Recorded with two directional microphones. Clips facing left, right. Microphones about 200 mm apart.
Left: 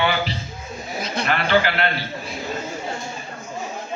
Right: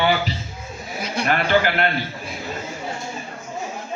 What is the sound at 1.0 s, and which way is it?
Speech, 10° right (ahead or behind).